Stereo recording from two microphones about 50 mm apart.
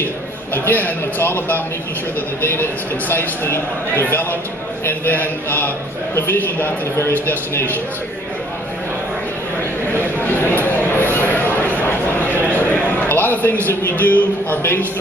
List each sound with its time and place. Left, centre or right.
0.7 s speech: left
10.2 s a sound: left
13.7 s speech: left